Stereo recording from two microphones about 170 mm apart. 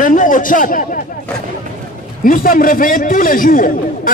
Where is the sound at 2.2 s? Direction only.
55° left (ahead or behind).